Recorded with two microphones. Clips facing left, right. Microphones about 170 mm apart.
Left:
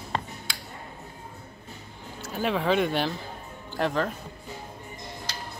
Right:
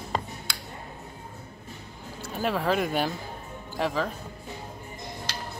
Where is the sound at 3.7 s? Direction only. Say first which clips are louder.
Left 1 dB; centre (ahead or behind).